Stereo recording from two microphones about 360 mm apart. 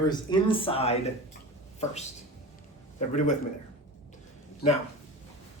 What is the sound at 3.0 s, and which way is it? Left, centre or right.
Speech, centre.